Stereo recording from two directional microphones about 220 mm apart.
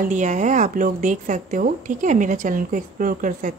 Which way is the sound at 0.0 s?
35° right (ahead or behind).